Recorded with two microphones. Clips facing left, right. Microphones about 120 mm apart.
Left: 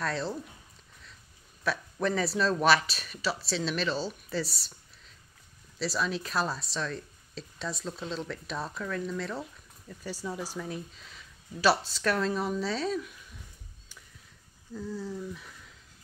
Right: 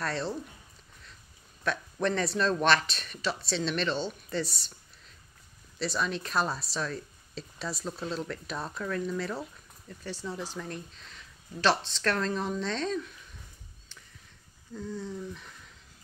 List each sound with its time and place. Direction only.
0.0 s speech: centre (ahead or behind)
1.6 s speech: 5° left (ahead or behind)
10.0 s speech: 10° left (ahead or behind)
14.7 s speech: 5° left (ahead or behind)